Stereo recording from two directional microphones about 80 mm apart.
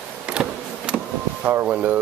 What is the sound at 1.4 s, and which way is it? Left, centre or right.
Speech, centre.